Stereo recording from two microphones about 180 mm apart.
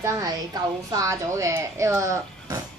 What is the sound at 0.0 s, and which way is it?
A woman's voice, 20° right (ahead or behind).